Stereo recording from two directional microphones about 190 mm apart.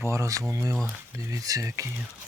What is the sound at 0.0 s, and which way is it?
Speech, 15° right (ahead or behind).